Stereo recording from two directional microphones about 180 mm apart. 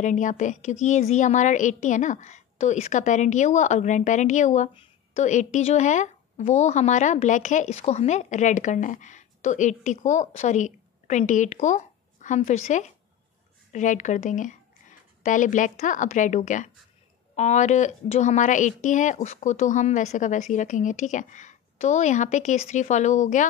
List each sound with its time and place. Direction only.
0.0 s a woman's voice: 45° left (ahead or behind)